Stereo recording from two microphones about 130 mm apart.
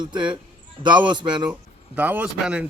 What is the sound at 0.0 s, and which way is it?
A man's voice, 35° right (ahead or behind).